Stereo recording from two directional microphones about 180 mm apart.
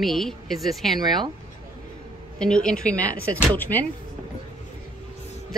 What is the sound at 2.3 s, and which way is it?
Speech, 5° left (ahead or behind).